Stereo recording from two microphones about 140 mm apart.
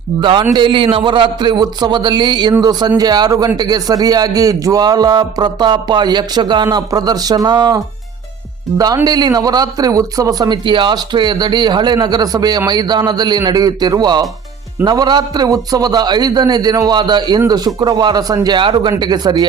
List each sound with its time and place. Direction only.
0.2 s a man's voice: 35° right (ahead or behind)
9.0 s a man's voice: 30° right (ahead or behind)